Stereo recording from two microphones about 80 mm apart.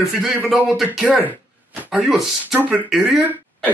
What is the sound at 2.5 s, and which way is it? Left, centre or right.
Speech, centre.